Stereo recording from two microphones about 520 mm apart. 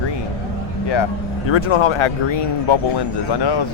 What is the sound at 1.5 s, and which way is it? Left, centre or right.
Speech, left.